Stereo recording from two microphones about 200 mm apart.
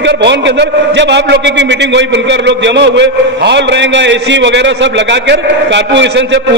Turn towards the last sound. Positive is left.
turn(degrees=-60)  # may be behind; listen again after turning